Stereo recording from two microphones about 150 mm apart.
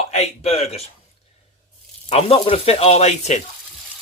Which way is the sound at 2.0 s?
40° left (ahead or behind).